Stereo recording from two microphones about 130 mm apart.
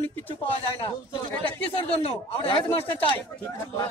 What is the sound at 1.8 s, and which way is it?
A man's voice, 45° left (ahead or behind).